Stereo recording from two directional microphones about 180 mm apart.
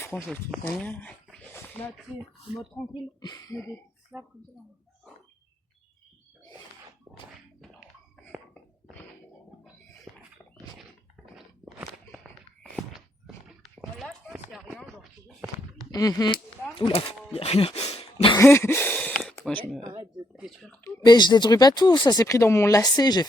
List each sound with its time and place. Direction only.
0.0 s a sound: 15° left (ahead or behind)
2.9 s speech: 25° left (ahead or behind)
4.1 s speech: 5° right (ahead or behind)
11.3 s walk: 5° right (ahead or behind)
15.9 s speech: 20° left (ahead or behind)
18.3 s a sound: 15° left (ahead or behind)
19.8 s speech: 30° right (ahead or behind)
20.3 s speech: centre (ahead or behind)
20.8 s speech: 25° left (ahead or behind)